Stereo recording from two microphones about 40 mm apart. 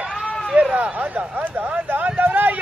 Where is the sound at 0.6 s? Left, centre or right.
Right.